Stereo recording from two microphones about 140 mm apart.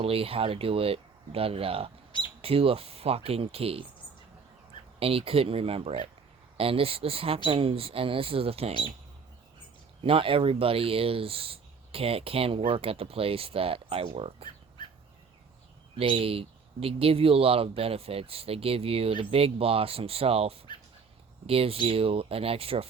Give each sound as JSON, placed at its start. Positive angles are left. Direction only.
{"t": 0.0, "sound": "speech", "side_deg": -45}
{"t": 4.9, "sound": "speech", "side_deg": -40}
{"t": 10.0, "sound": "speech", "side_deg": -40}
{"t": 16.0, "sound": "speech", "side_deg": -40}